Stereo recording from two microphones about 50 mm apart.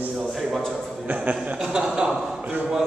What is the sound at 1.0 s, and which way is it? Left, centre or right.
Speech, right.